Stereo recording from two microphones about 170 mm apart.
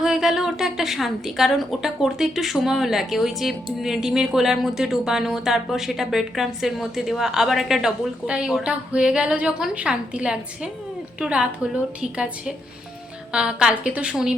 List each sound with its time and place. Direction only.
0.0 s a woman's voice: 5° right (ahead or behind)